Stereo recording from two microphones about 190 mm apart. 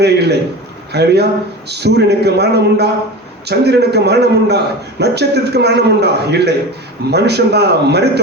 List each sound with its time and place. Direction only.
0.0 s a man's voice: 60° right (ahead or behind)